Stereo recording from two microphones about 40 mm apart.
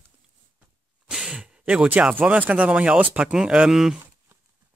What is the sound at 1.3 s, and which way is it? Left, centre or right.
Speech, right.